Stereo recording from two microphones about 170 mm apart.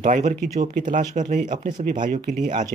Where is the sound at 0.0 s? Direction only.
50° right (ahead or behind).